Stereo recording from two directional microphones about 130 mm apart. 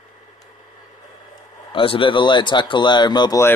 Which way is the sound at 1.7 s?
40° left (ahead or behind).